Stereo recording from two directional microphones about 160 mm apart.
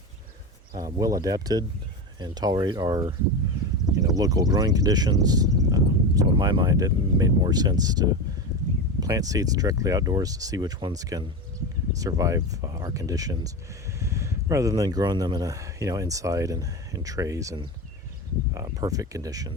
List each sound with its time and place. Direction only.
0.7 s speech: 25° right (ahead or behind)